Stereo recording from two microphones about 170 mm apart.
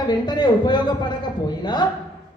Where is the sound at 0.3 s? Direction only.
25° left (ahead or behind).